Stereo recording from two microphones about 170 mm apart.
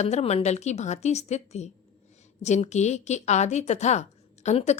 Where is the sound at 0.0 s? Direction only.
40° left (ahead or behind).